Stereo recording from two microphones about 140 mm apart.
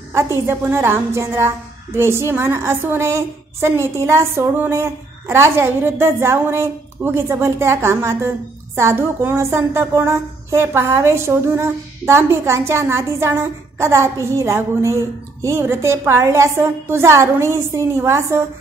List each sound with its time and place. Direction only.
0.5 s a woman's voice: 15° right (ahead or behind)